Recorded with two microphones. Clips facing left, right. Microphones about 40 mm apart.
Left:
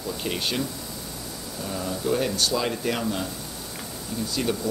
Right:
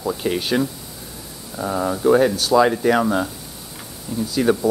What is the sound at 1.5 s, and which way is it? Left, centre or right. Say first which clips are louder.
Speech: right 9 dB; right.